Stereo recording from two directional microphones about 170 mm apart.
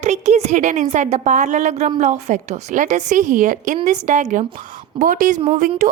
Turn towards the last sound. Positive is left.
turn(degrees=-45)  # may be behind; listen again after turning